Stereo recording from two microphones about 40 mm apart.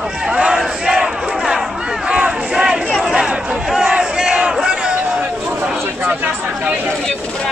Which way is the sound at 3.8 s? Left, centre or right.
Centre.